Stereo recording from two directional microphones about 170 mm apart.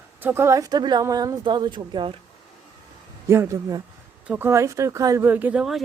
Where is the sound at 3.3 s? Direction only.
15° right (ahead or behind).